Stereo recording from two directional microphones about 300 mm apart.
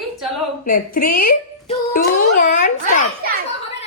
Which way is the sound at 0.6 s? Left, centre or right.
Left.